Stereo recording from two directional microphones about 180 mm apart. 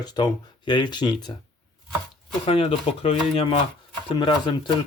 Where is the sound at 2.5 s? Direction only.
35° left (ahead or behind).